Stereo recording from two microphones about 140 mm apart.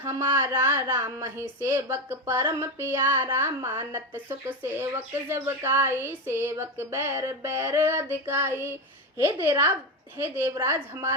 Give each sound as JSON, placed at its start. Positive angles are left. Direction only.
{"t": 0.0, "sound": "a woman's voice", "side_deg": -20}